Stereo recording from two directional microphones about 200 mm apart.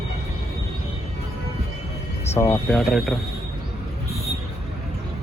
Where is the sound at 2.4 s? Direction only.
15° left (ahead or behind).